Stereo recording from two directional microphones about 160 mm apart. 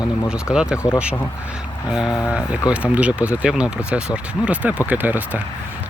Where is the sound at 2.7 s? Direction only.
10° right (ahead or behind).